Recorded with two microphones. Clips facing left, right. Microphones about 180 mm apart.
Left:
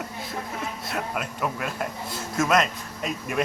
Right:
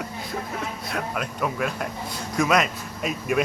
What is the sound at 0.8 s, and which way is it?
Speech, 5° left (ahead or behind).